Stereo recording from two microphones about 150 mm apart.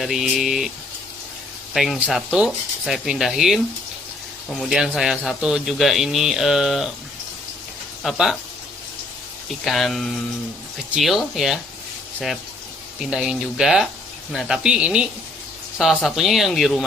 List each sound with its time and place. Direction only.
0.0 s a man's voice: centre (ahead or behind)
1.7 s a man's voice: centre (ahead or behind)
4.6 s a man's voice: 5° right (ahead or behind)
8.0 s a man's voice: centre (ahead or behind)
9.6 s a man's voice: centre (ahead or behind)
13.0 s a man's voice: 5° right (ahead or behind)